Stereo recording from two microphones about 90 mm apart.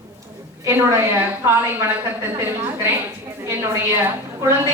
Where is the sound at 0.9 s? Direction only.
30° right (ahead or behind).